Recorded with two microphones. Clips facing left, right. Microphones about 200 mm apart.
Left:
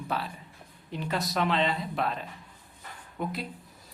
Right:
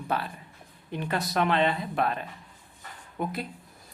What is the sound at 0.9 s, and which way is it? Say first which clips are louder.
Speech: right 1 dB; 55° right (ahead or behind).